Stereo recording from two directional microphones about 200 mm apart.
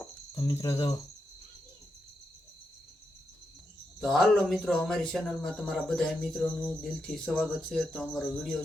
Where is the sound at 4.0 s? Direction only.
Centre (ahead or behind).